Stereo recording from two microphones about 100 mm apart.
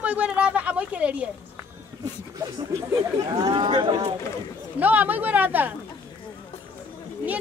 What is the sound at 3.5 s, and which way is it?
Speech, 55° right (ahead or behind).